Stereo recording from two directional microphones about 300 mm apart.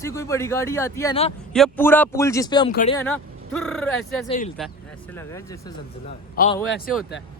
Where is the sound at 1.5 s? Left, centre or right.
Centre.